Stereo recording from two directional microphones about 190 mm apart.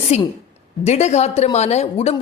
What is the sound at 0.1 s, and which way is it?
A woman's voice, 35° left (ahead or behind).